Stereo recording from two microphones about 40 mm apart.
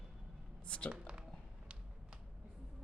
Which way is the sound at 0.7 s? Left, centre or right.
Left.